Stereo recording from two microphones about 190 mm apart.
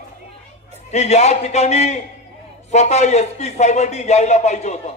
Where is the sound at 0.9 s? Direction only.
35° left (ahead or behind).